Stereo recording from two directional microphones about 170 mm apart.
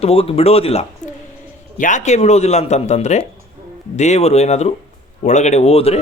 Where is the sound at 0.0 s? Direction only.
35° left (ahead or behind).